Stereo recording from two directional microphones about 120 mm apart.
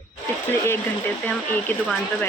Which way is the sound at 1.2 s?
15° left (ahead or behind).